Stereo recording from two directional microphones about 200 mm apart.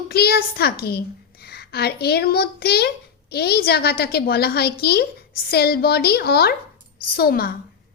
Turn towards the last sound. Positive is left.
turn(degrees=50)  # may be behind; listen again after turning